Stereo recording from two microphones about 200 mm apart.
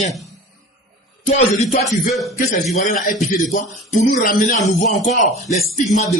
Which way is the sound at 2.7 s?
40° left (ahead or behind).